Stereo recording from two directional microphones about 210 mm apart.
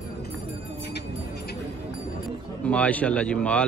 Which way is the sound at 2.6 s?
5° left (ahead or behind).